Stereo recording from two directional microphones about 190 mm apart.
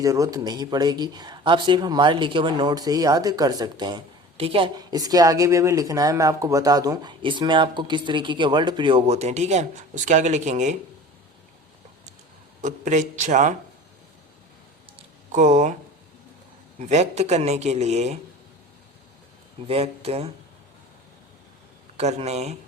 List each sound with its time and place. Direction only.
0.0 s speech: 15° right (ahead or behind); by 10.8 s 40° right (ahead or behind)
12.6 s a man's voice: 40° right (ahead or behind)
15.3 s speech: 40° right (ahead or behind)
16.9 s a man's voice: 35° right (ahead or behind)
19.6 s a man's voice: 30° right (ahead or behind)
21.9 s a man's voice: 35° right (ahead or behind)